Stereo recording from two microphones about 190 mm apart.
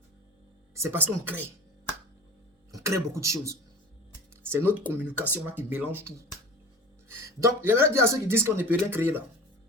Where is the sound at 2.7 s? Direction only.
15° right (ahead or behind).